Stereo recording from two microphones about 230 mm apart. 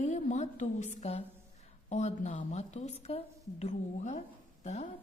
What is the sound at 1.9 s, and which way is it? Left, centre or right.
A woman's voice, left.